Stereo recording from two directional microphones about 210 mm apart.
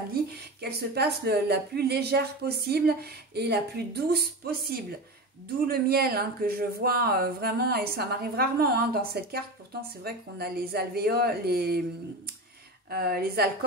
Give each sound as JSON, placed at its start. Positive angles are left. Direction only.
{"t": 0.1, "sound": "speech", "side_deg": -50}
{"t": 12.9, "sound": "speech", "side_deg": -45}